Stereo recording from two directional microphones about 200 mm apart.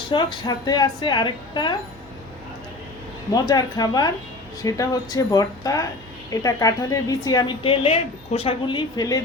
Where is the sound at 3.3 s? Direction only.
20° left (ahead or behind).